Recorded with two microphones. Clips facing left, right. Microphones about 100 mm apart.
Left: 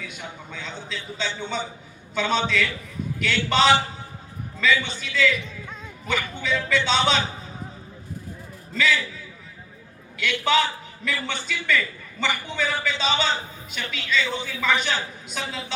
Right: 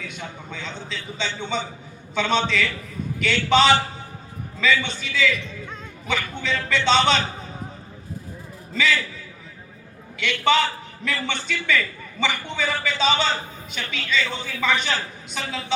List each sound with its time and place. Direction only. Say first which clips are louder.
0.0 s a man's voice: right 2 dB; 5° left (ahead or behind)
8.7 s a man's voice: even; centre (ahead or behind)
10.2 s a man's voice: right 2 dB; centre (ahead or behind)